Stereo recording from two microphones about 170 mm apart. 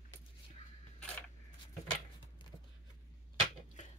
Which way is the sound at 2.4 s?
25° left (ahead or behind).